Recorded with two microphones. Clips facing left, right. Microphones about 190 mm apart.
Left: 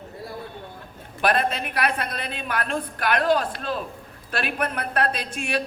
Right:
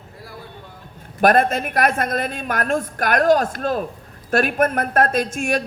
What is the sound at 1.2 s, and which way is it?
A woman's voice, 45° right (ahead or behind).